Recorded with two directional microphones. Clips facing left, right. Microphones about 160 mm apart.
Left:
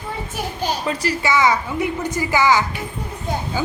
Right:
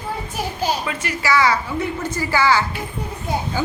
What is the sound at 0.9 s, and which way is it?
Speech, 35° left (ahead or behind).